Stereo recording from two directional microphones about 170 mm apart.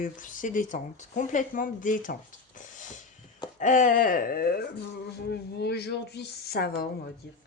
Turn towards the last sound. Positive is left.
turn(degrees=65)  # may be behind; listen again after turning